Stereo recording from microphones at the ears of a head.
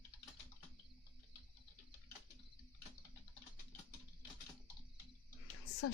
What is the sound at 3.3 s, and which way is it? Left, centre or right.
Typing, left.